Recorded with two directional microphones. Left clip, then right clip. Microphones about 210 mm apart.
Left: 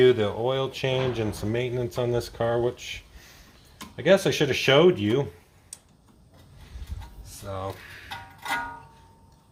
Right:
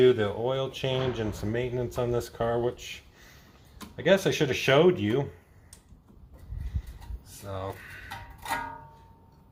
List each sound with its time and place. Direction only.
0.0 s speech: 35° left (ahead or behind)
7.4 s speech: 35° left (ahead or behind)